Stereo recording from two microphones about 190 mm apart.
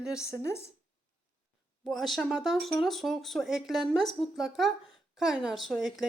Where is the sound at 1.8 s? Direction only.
Centre (ahead or behind).